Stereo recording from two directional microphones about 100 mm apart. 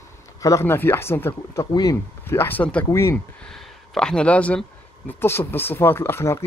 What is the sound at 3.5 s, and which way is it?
Speech, 10° left (ahead or behind).